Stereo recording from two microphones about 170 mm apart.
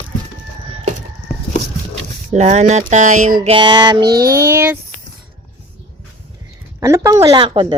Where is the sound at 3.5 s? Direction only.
30° right (ahead or behind).